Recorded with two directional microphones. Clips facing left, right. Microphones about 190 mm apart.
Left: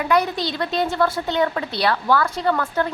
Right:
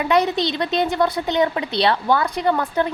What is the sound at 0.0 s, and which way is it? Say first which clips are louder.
A woman's voice: right 2 dB; 20° right (ahead or behind).